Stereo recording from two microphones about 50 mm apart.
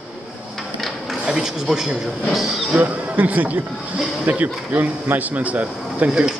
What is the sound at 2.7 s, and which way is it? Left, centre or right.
Speech, right.